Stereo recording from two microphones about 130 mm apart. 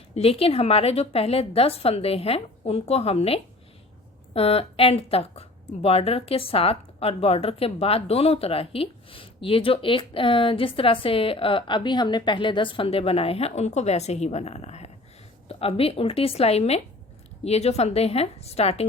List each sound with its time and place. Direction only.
0.1 s speech: 50° left (ahead or behind)